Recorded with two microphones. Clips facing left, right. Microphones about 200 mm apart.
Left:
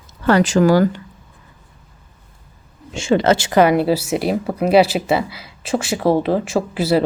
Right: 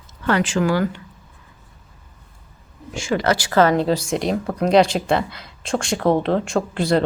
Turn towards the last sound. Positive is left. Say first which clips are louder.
# left 2 dB
turn(degrees=5)  # may be behind; listen again after turning